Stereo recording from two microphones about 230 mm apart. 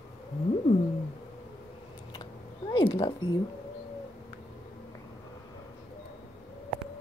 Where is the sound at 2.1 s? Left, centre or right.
Centre.